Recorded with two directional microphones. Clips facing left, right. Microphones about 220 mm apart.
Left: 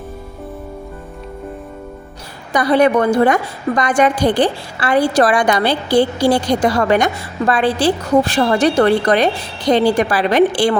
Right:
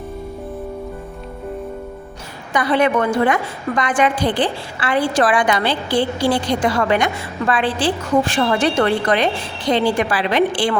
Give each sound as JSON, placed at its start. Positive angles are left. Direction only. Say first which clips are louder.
{"t": 2.5, "sound": "a woman's voice", "louder": "left 4 dB", "side_deg": 40}